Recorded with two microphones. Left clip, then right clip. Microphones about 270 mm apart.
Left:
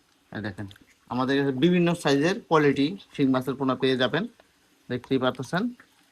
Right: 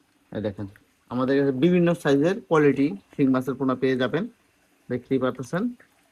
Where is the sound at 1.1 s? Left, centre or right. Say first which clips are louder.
Right 2 dB; centre.